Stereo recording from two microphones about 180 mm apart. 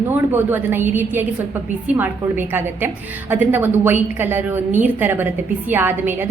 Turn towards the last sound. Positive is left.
turn(degrees=-10)  # may be behind; listen again after turning